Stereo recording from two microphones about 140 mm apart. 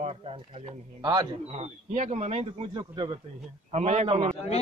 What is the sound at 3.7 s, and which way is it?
Speech, 55° right (ahead or behind).